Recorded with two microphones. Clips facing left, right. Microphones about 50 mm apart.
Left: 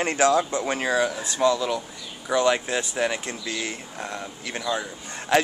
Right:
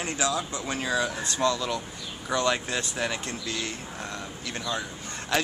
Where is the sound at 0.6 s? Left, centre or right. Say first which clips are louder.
Left 4 dB; left.